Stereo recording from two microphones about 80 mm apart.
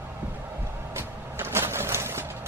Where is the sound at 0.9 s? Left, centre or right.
Right.